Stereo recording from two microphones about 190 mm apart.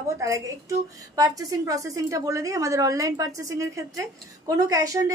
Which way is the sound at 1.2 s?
20° right (ahead or behind).